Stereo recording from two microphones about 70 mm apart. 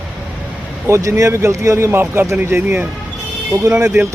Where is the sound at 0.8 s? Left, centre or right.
Right.